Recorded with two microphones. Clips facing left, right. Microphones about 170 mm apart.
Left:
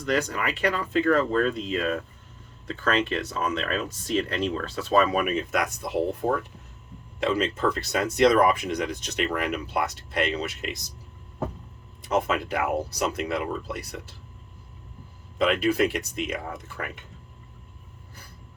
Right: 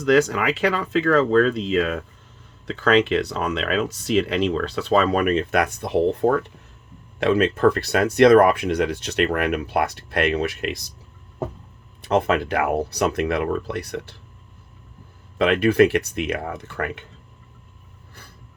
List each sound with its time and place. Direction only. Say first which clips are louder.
0.0 s speech: right 8 dB; 90° right; by 10.8 s 65° right (ahead or behind)
12.0 s speech: right 5 dB; 65° right (ahead or behind)
15.4 s speech: right 6 dB; 65° right (ahead or behind)